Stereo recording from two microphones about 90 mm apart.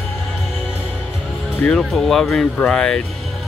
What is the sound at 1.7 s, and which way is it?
Speech, 5° left (ahead or behind).